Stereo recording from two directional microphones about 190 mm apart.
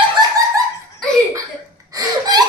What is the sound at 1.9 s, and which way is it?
Gasp, 20° right (ahead or behind).